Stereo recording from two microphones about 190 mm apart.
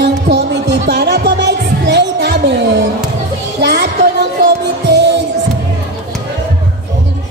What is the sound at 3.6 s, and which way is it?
Music, 55° right (ahead or behind).